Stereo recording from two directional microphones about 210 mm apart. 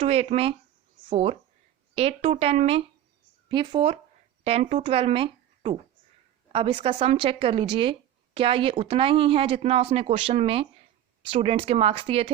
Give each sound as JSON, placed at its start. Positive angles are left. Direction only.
{"t": 0.0, "sound": "speech", "side_deg": -30}